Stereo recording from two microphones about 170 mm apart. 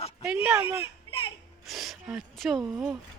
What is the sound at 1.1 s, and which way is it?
Music, 30° left (ahead or behind).